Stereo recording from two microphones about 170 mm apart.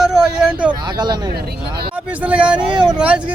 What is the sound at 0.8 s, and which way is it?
Speech, 25° right (ahead or behind).